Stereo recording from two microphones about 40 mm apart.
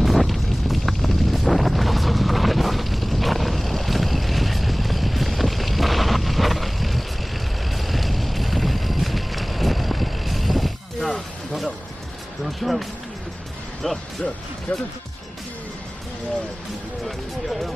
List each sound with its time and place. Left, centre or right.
0.0 s wind noise: centre
7.7 s vehicle: centre
12.4 s music: centre
13.8 s music: centre
14.7 s speech: left
17.5 s music: centre